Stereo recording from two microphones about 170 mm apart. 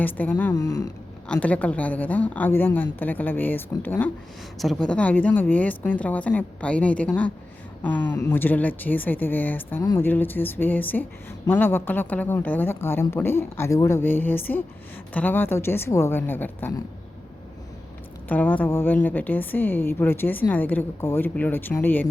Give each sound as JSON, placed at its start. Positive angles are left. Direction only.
{"t": 0.0, "sound": "speech", "side_deg": 10}
{"t": 0.5, "sound": "speech", "side_deg": 20}
{"t": 1.3, "sound": "speech", "side_deg": 10}
{"t": 18.3, "sound": "speech", "side_deg": 10}